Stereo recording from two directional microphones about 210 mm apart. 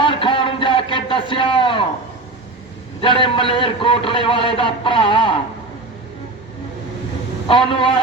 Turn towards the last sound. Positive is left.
turn(degrees=25)  # may be behind; listen again after turning